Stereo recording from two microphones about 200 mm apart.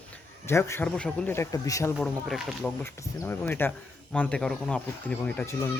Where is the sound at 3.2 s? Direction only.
10° left (ahead or behind).